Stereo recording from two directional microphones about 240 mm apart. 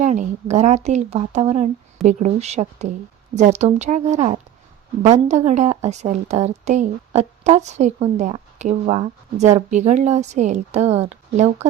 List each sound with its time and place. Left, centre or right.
0.0 s a woman's voice: right